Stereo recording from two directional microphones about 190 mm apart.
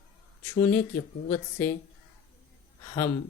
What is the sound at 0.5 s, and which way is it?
Speech, 10° left (ahead or behind).